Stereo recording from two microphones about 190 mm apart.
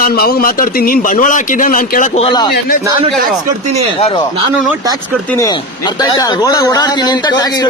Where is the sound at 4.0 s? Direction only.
30° left (ahead or behind).